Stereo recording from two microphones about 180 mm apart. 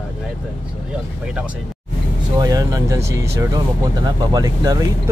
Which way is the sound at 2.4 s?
20° right (ahead or behind).